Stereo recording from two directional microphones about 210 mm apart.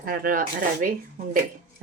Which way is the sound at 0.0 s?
45° right (ahead or behind).